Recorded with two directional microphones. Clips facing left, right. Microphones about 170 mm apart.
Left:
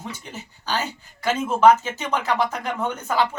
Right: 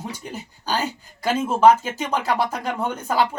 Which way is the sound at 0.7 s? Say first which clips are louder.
Right 2 dB; 35° right (ahead or behind).